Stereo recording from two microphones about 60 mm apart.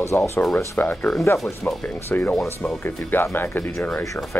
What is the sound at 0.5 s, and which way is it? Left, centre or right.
Speech, left.